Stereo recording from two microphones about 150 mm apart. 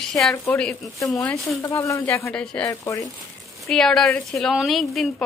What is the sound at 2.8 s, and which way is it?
Speech, 20° left (ahead or behind).